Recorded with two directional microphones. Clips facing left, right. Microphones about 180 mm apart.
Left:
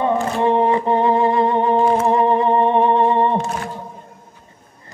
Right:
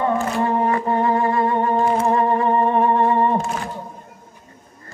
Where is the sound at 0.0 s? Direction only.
20° left (ahead or behind).